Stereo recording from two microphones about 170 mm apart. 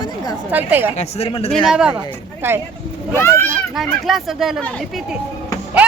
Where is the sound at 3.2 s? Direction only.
15° left (ahead or behind).